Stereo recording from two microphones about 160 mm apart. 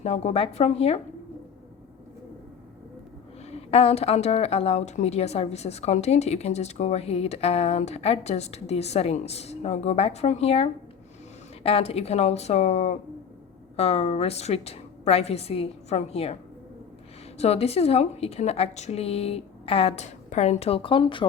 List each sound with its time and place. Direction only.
0.0 s a woman's voice: 40° left (ahead or behind)
3.7 s a woman's voice: 40° left (ahead or behind)